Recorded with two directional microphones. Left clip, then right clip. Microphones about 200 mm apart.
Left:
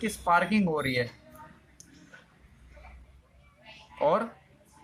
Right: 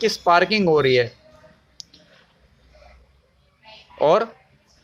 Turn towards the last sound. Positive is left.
turn(degrees=-50)  # may be behind; listen again after turning